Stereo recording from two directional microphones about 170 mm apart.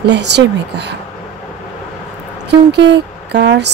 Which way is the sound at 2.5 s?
85° right.